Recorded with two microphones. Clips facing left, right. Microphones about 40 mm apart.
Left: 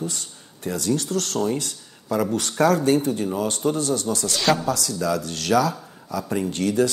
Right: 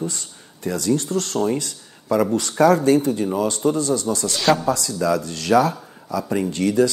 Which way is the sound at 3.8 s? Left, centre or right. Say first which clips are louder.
Right 3 dB; left.